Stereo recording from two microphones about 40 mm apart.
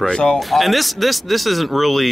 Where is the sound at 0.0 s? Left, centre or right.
Left.